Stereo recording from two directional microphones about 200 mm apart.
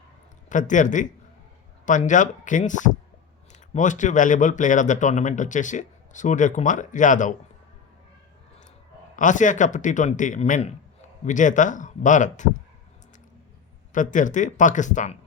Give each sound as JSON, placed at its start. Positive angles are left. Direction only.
{"t": 0.5, "sound": "speech", "side_deg": 40}
{"t": 9.1, "sound": "speech", "side_deg": 40}
{"t": 13.9, "sound": "speech", "side_deg": 40}